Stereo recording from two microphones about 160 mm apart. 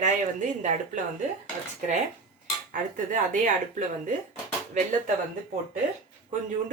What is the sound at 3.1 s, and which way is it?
Speech, 55° right (ahead or behind).